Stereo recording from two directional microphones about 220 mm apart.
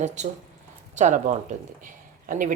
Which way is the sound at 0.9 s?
35° right (ahead or behind).